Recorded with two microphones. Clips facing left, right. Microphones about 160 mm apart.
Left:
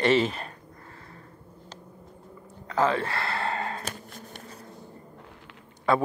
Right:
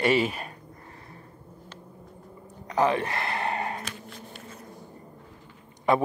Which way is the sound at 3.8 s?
40° left (ahead or behind).